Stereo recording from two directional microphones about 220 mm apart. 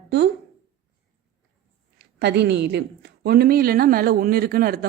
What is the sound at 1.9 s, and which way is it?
Speech, 50° right (ahead or behind).